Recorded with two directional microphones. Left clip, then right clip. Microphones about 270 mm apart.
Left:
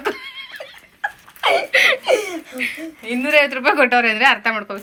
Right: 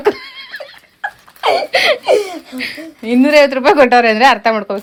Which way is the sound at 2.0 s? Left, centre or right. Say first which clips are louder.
Right 5 dB; right.